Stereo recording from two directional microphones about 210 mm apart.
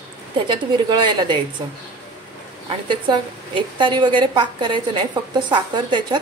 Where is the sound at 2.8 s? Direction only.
20° right (ahead or behind).